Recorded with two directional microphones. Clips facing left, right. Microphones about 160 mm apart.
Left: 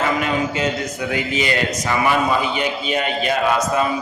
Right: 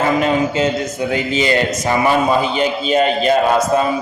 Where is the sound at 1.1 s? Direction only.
30° right (ahead or behind).